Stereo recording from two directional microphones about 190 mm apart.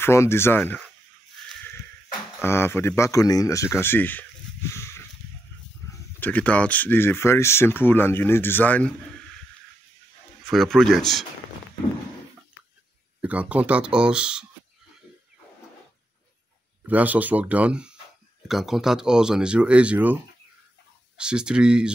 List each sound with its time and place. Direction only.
0.0 s speech: 15° left (ahead or behind)
2.4 s speech: 10° left (ahead or behind)
4.7 s a sound: 15° left (ahead or behind)
6.1 s speech: 10° left (ahead or behind)
10.4 s speech: centre (ahead or behind)
13.2 s speech: 5° right (ahead or behind)
16.8 s speech: 10° right (ahead or behind)
21.2 s speech: 5° right (ahead or behind)